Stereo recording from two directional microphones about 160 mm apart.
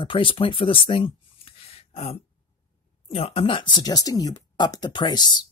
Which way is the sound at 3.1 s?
35° left (ahead or behind).